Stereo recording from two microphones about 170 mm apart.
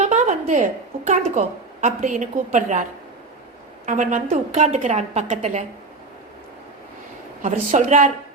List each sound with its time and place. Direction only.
0.0 s a woman's voice: 45° right (ahead or behind)
3.8 s a woman's voice: 50° right (ahead or behind)
7.4 s a woman's voice: 45° right (ahead or behind)